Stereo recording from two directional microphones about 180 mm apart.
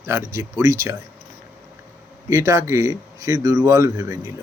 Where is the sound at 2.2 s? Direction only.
15° right (ahead or behind).